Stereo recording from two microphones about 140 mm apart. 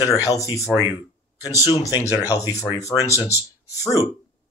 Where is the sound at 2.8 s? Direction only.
20° left (ahead or behind).